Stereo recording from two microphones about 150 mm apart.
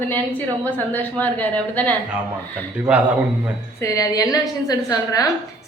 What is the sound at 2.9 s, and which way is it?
Speech, 10° right (ahead or behind).